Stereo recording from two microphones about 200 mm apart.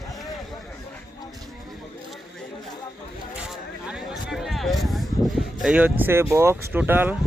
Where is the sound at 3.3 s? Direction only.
5° right (ahead or behind).